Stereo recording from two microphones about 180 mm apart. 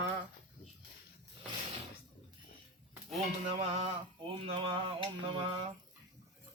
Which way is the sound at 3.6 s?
35° right (ahead or behind).